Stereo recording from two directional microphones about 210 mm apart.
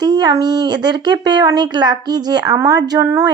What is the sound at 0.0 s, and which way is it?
Speech, 20° right (ahead or behind).